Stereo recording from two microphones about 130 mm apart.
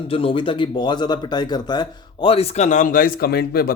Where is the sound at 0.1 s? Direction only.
45° left (ahead or behind).